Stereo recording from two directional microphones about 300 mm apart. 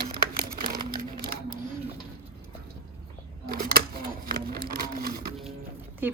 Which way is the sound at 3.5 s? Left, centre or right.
Right.